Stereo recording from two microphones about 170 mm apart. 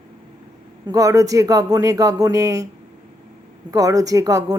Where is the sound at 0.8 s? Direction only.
20° right (ahead or behind).